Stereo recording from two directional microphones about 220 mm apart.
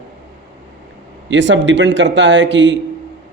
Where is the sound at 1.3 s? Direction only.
55° right (ahead or behind).